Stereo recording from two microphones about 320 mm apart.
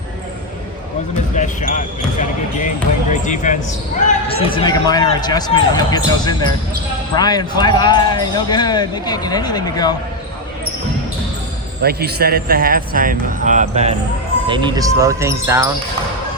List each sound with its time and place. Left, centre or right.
1.4 s speech: left
11.8 s speech: right; by 15.7 s centre